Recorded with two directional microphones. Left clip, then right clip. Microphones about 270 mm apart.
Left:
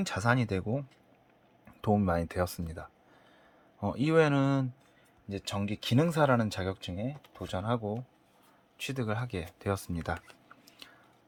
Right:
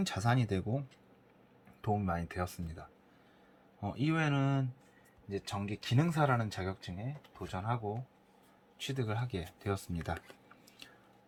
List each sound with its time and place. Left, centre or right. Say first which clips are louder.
0.0 s speech: left 5 dB; centre
1.8 s speech: left 6 dB; left
8.8 s speech: left 4 dB; centre